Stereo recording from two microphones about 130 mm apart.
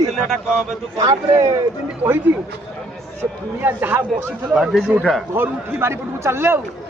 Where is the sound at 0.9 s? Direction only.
30° right (ahead or behind).